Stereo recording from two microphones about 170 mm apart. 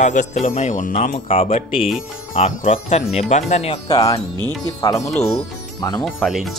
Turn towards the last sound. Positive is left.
turn(degrees=0)  # may be behind; listen again after turning